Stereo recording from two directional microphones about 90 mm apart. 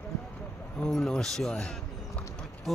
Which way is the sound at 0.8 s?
5° left (ahead or behind).